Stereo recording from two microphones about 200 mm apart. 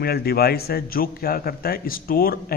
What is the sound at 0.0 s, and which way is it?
A man's voice, 50° left (ahead or behind).